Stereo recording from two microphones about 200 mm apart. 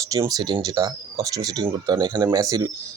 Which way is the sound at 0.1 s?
20° right (ahead or behind).